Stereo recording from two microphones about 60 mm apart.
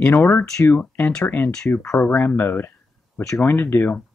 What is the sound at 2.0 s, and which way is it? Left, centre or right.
Speech, left.